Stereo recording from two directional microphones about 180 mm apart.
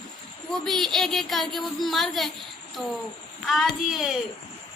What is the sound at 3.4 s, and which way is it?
Speech, centre (ahead or behind).